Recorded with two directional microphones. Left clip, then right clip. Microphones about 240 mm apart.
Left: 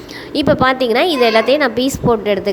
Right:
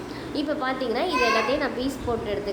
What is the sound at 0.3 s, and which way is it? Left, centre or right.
A woman's voice, left.